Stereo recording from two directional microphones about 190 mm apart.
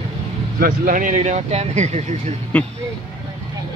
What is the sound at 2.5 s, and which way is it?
Speech, 10° left (ahead or behind).